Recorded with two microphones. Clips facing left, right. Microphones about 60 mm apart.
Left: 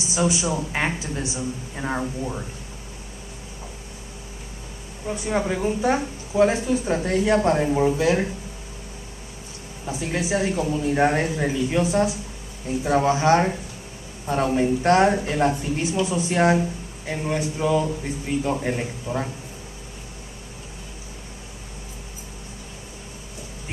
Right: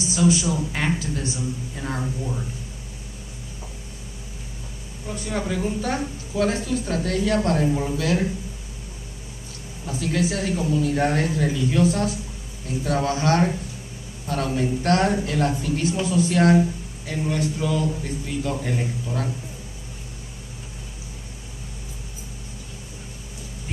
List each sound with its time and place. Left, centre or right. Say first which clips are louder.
0.1 s speech: right 2 dB; left
5.0 s speech: left 4 dB; left
9.8 s speech: right 2 dB; left